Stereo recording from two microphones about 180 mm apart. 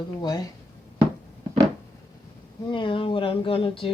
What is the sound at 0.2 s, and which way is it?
Speech, 20° left (ahead or behind).